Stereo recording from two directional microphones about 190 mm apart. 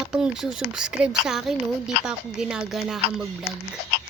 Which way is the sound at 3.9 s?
55° left (ahead or behind).